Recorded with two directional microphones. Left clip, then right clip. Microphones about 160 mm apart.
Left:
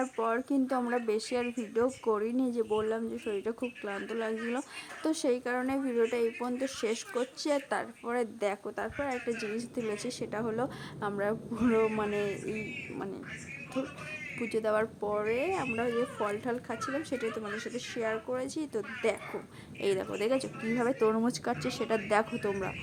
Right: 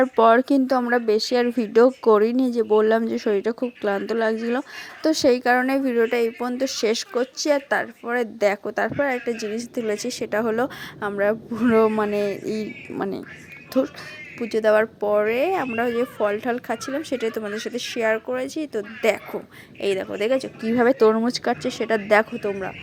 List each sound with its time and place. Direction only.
0.0 s a woman's voice: 45° right (ahead or behind)
14.3 s a woman's voice: 20° right (ahead or behind)
19.0 s a woman's voice: 30° right (ahead or behind)
19.8 s a woman's voice: 15° right (ahead or behind)
20.7 s a woman's voice: 30° right (ahead or behind)
21.2 s a woman's voice: 15° right (ahead or behind)